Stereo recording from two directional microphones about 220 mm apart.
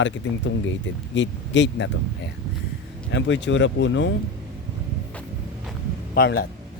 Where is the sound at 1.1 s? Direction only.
55° left (ahead or behind).